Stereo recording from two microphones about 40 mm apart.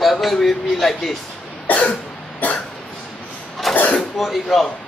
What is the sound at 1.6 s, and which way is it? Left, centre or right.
Cough, left.